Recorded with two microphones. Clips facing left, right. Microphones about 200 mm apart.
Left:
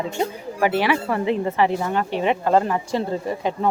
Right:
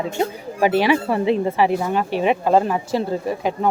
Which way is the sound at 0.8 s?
15° right (ahead or behind).